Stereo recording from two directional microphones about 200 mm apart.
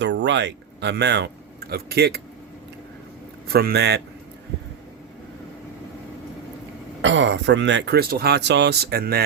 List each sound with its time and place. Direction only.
0.0 s speech: 60° right (ahead or behind)
3.5 s a man's voice: 50° right (ahead or behind)
7.0 s speech: 65° right (ahead or behind); by 9.2 s 50° right (ahead or behind)